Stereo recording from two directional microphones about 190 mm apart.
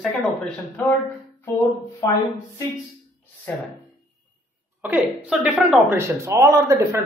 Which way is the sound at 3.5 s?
10° left (ahead or behind).